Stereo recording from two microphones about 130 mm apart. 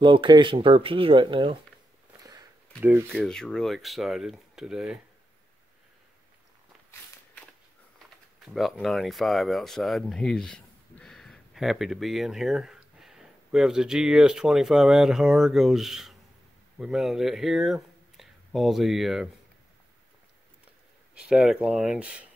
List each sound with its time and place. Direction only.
0.0 s speech: 40° right (ahead or behind)
2.8 s speech: 20° right (ahead or behind)
3.2 s speech: 5° left (ahead or behind)
8.7 s speech: centre (ahead or behind)
21.1 s speech: 5° right (ahead or behind)